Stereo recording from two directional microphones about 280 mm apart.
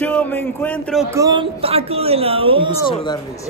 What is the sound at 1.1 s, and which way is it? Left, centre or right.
A woman's voice, centre.